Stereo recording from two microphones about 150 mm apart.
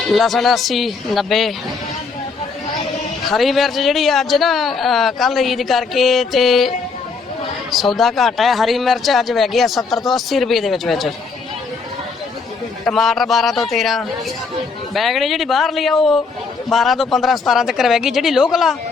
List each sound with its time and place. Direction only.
0.1 s speech: centre (ahead or behind)
3.3 s speech: centre (ahead or behind)
12.8 s speech: centre (ahead or behind)